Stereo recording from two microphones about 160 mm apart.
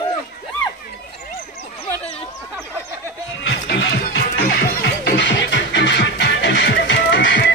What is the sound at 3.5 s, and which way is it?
Music, 90° left.